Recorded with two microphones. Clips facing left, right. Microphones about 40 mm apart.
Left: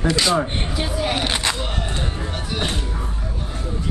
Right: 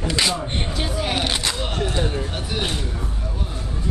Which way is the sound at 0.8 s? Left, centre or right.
Centre.